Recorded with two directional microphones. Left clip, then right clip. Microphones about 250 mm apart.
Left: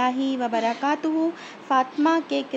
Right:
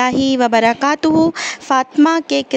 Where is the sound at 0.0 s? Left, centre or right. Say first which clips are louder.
Right 9 dB; right.